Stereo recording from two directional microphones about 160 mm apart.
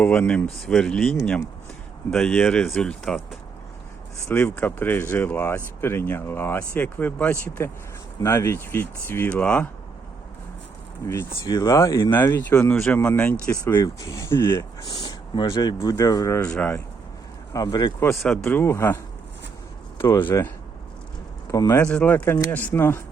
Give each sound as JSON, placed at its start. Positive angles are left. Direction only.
{"t": 0.0, "sound": "speech", "side_deg": 10}
{"t": 4.3, "sound": "speech", "side_deg": 15}
{"t": 11.0, "sound": "speech", "side_deg": 20}
{"t": 14.5, "sound": "speech", "side_deg": 25}
{"t": 16.4, "sound": "speech", "side_deg": 5}
{"t": 17.5, "sound": "speech", "side_deg": 25}
{"t": 18.4, "sound": "speech", "side_deg": 15}
{"t": 20.0, "sound": "speech", "side_deg": 15}
{"t": 21.5, "sound": "speech", "side_deg": 20}
{"t": 21.8, "sound": "speech", "side_deg": 5}